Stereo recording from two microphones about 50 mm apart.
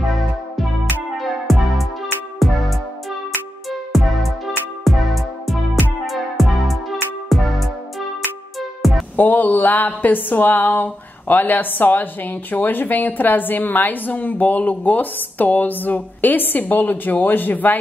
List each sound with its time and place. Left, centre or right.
1.2 s music: centre
3.9 s music: centre
9.1 s speech: left